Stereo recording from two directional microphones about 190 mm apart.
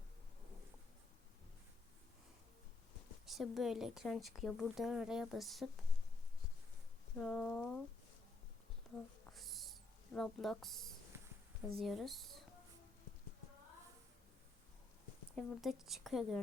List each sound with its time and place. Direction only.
3.2 s a woman's voice: centre (ahead or behind)
7.2 s a woman's voice: 5° left (ahead or behind)
8.9 s a sound: centre (ahead or behind)
11.7 s a woman's voice: centre (ahead or behind)
15.4 s a woman's voice: centre (ahead or behind)